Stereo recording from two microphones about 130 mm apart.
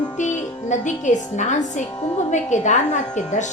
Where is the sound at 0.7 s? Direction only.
70° left (ahead or behind).